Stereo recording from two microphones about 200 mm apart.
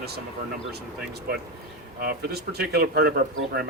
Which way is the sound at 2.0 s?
50° right (ahead or behind).